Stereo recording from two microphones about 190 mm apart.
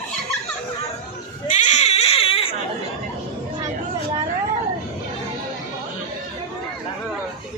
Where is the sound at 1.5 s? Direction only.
40° left (ahead or behind).